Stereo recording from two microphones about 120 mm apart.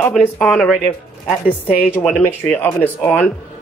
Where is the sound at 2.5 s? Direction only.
15° left (ahead or behind).